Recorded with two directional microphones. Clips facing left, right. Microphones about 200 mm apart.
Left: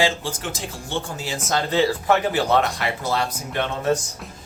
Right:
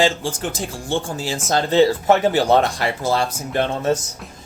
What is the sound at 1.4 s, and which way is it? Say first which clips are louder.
Speech: right 5 dB; 30° right (ahead or behind).